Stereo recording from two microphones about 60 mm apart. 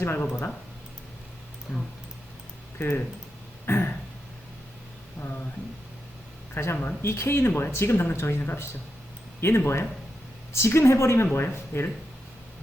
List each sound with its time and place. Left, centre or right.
0.0 s speech: left
2.7 s speech: left
6.5 s speech: left
11.3 s speech: left